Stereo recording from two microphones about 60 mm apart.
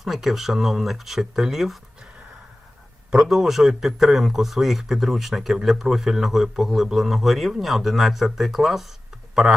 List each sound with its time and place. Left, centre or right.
0.0 s a man's voice: centre
3.1 s a man's voice: centre